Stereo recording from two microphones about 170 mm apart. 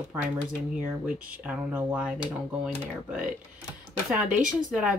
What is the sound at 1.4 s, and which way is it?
Speech, 10° right (ahead or behind).